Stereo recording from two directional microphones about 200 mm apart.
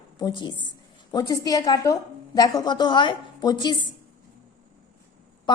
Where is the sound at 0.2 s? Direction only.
20° left (ahead or behind).